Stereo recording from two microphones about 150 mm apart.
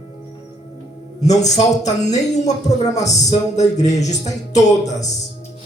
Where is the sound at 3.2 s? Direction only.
50° left (ahead or behind).